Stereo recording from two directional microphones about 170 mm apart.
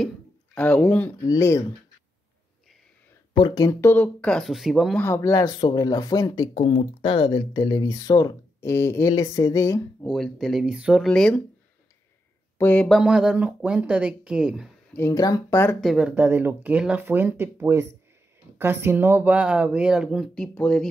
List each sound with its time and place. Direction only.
0.6 s speech: 10° left (ahead or behind)
3.3 s speech: 25° left (ahead or behind)
3.9 s speech: 10° left (ahead or behind)
4.9 s speech: 15° left (ahead or behind)
10.0 s speech: centre (ahead or behind)
11.1 s speech: 5° left (ahead or behind)
12.5 s speech: 10° left (ahead or behind)
14.9 s speech: 15° left (ahead or behind)
15.8 s speech: centre (ahead or behind)
16.2 s speech: 10° right (ahead or behind); by 20.9 s 5° left (ahead or behind)